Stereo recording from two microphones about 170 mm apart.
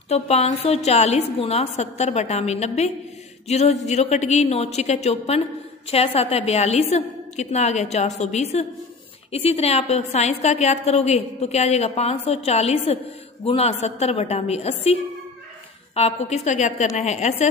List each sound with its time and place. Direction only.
0.1 s a woman's voice: 40° left (ahead or behind)